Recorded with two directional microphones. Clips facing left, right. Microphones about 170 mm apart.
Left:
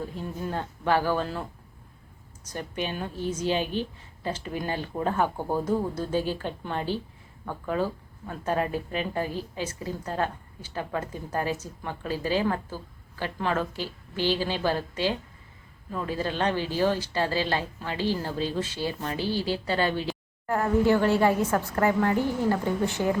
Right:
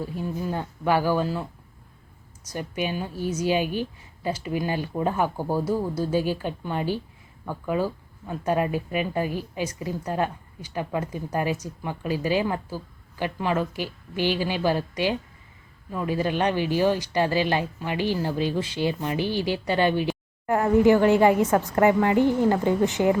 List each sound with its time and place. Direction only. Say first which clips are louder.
0.0 s speech: right 4 dB; 10° right (ahead or behind)
2.5 s speech: right 3 dB; 10° right (ahead or behind)